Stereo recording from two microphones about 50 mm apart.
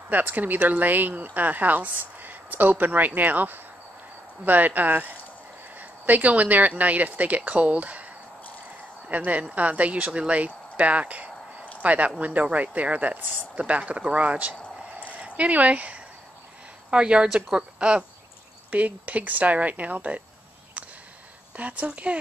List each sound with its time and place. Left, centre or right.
0.1 s speech: right
9.1 s speech: right
18.7 s speech: right
20.8 s a sound: right
21.5 s speech: right